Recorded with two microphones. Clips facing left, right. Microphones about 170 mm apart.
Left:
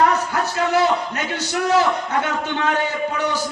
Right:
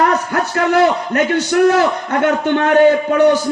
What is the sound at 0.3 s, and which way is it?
A man's voice, 60° right (ahead or behind).